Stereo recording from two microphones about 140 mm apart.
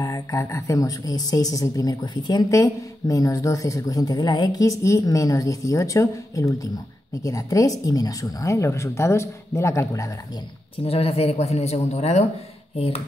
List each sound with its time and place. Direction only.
0.0 s speech: 25° left (ahead or behind)
10.8 s speech: 45° left (ahead or behind)